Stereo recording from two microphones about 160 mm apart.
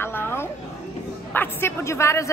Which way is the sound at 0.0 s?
15° left (ahead or behind).